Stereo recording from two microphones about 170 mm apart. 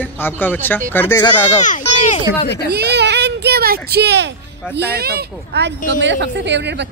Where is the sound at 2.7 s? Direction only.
75° right (ahead or behind).